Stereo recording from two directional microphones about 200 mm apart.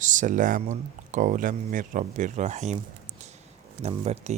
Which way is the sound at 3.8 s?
35° right (ahead or behind).